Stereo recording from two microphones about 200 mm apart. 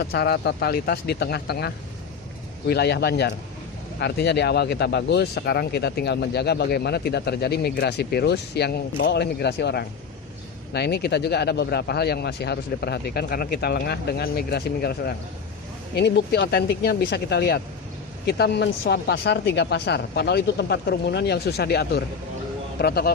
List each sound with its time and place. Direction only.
0.0 s a man's voice: 55° left (ahead or behind)